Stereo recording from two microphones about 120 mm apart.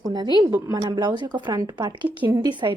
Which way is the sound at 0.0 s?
40° right (ahead or behind).